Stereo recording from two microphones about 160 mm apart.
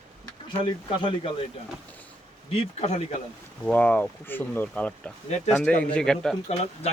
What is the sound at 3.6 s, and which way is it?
Speech, 10° left (ahead or behind).